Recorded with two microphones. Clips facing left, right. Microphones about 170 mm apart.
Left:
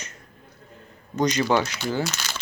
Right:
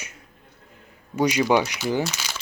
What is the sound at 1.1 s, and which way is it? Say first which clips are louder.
Speech: right 2 dB; 10° right (ahead or behind).